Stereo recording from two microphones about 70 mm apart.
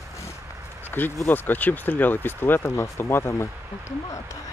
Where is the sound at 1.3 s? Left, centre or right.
Left.